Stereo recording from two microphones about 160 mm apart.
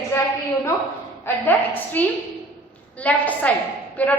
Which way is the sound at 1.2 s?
10° left (ahead or behind).